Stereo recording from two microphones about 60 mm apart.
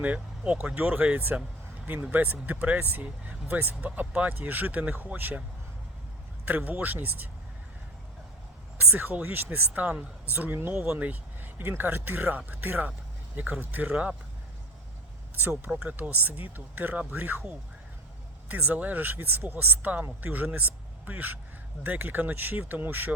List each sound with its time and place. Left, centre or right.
0.0 s speech: right
6.4 s speech: right
8.8 s speech: right
10.8 s speech: right
13.9 s speech: centre
15.4 s speech: right